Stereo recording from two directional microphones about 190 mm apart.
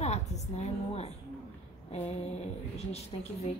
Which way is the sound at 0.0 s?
35° left (ahead or behind).